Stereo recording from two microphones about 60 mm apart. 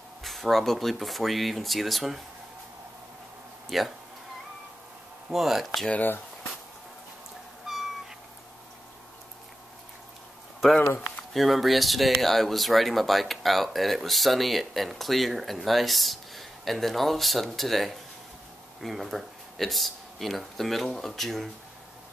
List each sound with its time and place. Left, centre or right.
0.2 s speech: centre
3.6 s speech: centre
5.3 s speech: centre
7.6 s cat: centre
11.3 s speech: centre